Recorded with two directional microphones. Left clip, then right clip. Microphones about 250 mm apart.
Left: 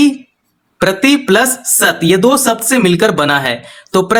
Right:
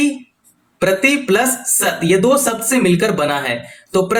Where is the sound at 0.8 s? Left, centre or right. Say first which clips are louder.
Left 3 dB; left.